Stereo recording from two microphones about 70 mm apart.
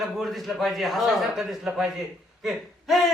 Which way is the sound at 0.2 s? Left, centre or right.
Centre.